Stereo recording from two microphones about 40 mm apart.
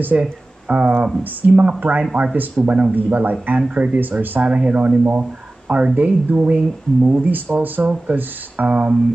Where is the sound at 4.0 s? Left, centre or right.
Right.